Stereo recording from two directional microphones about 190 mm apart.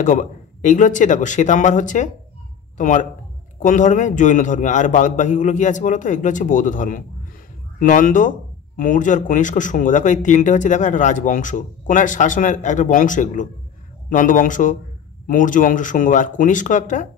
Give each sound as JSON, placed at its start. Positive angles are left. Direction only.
{"t": 0.0, "sound": "a man's voice", "side_deg": 40}